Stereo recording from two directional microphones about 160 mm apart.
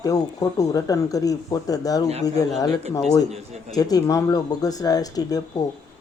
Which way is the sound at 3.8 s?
25° left (ahead or behind).